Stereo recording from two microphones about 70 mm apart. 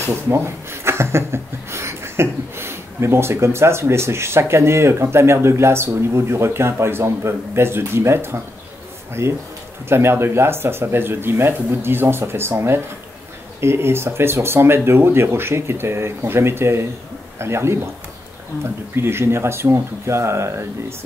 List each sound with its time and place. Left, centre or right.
0.0 s speech: right